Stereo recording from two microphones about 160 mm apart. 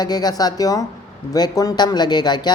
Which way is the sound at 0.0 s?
25° left (ahead or behind).